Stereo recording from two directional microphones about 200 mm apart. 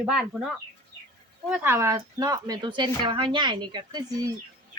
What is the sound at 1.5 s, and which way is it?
Speech, 10° right (ahead or behind).